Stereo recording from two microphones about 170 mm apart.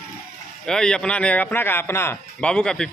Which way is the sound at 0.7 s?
5° left (ahead or behind).